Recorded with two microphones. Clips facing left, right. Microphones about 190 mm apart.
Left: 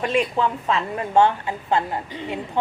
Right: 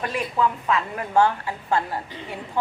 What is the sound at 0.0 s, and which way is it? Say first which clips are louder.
A woman's voice: left 3 dB; 25° left (ahead or behind).